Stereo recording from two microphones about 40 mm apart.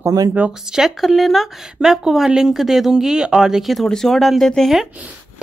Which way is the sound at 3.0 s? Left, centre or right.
Centre.